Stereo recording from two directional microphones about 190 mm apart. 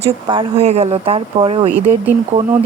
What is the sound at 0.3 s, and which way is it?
Speech, 30° right (ahead or behind).